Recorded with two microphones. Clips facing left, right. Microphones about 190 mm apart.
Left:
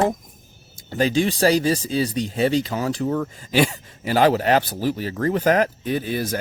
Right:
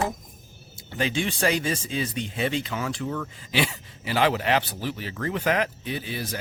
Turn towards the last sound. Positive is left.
turn(degrees=45)  # may be behind; listen again after turning